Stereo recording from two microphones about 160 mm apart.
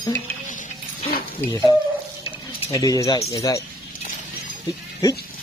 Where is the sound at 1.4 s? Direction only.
25° left (ahead or behind).